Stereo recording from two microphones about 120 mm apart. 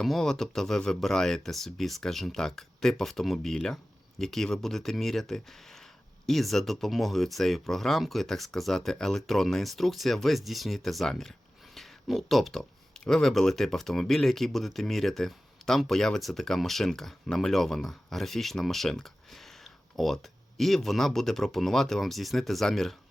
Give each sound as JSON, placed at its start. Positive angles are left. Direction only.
{"t": 0.0, "sound": "speech", "side_deg": 5}